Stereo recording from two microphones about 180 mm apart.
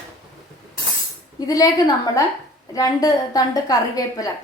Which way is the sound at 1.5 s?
20° left (ahead or behind).